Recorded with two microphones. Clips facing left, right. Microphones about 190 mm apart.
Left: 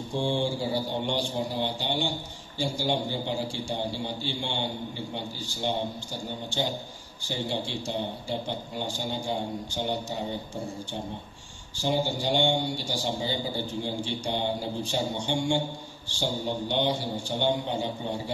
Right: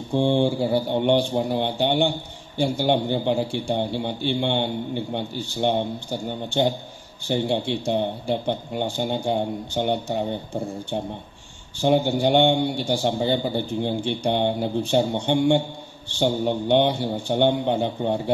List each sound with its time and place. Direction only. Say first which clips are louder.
0.1 s mantra: right 8 dB; 60° right (ahead or behind)
7.2 s mantra: right 8 dB; 60° right (ahead or behind)
11.8 s mantra: right 8 dB; 60° right (ahead or behind)